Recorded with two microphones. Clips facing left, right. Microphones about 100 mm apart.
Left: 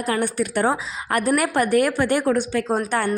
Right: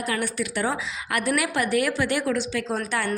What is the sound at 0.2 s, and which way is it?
A woman's voice, 50° left (ahead or behind).